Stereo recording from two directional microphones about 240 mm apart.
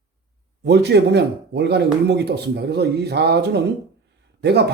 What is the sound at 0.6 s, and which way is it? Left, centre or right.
Speech, right.